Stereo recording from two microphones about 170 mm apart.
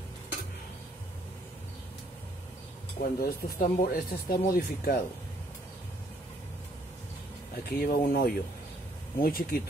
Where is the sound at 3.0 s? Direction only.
65° left (ahead or behind).